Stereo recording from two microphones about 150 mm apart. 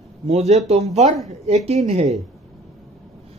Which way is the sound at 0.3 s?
50° right (ahead or behind).